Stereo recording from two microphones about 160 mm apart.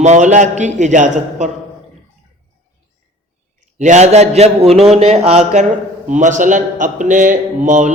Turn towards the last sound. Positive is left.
turn(degrees=-50)  # may be behind; listen again after turning